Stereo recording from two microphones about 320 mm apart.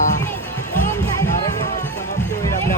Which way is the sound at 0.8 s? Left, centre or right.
Centre.